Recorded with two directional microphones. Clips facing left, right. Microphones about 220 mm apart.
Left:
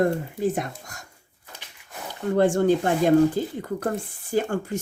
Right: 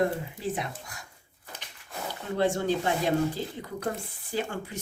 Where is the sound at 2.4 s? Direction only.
50° left (ahead or behind).